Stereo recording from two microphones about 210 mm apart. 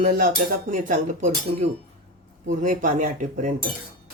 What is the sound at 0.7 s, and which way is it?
Dishes, 35° right (ahead or behind).